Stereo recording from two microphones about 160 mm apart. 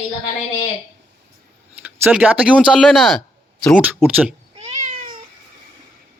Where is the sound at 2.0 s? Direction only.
10° right (ahead or behind).